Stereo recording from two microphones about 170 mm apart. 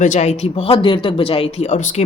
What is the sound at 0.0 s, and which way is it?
Speech, 45° left (ahead or behind).